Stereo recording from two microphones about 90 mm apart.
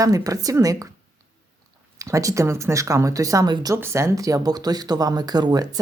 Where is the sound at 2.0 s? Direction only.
35° right (ahead or behind).